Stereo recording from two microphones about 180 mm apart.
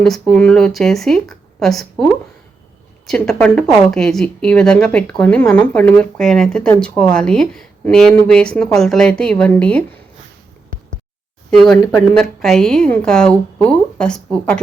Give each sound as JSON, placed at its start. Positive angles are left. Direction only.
{"t": 0.0, "sound": "speech", "side_deg": 5}
{"t": 3.1, "sound": "speech", "side_deg": 5}
{"t": 11.5, "sound": "speech", "side_deg": 0}